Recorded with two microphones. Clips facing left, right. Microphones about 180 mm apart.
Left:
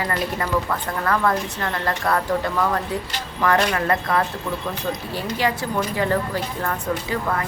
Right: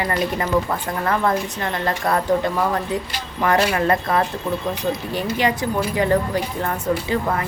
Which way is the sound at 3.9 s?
25° right (ahead or behind).